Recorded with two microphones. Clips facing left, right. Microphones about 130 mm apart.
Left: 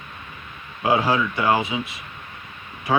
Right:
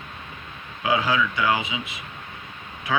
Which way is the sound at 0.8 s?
40° left (ahead or behind).